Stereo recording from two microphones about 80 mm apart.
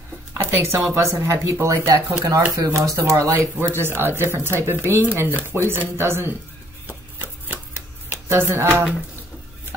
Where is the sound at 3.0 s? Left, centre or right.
Right.